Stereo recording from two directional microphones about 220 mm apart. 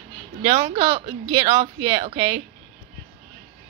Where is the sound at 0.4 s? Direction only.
25° right (ahead or behind).